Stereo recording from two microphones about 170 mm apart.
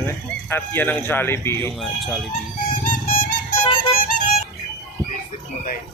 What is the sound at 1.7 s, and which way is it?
Speech, centre (ahead or behind).